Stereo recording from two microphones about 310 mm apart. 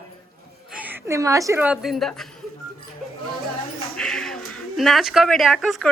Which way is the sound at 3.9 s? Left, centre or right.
Centre.